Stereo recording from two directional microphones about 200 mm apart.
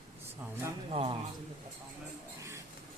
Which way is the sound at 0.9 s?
30° right (ahead or behind).